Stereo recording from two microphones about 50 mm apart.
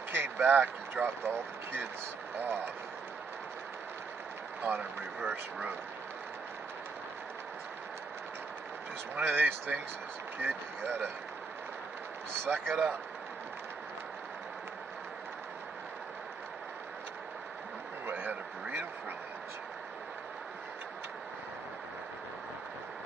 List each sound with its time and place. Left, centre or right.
0.1 s a sound: right
0.5 s speech: right
1.0 s speech: right
4.7 s speech: right
9.2 s speech: right
12.4 s speech: right
18.0 s a sound: right